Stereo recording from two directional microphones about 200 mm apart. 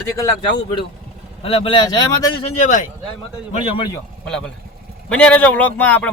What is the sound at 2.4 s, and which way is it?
Speech, 35° left (ahead or behind).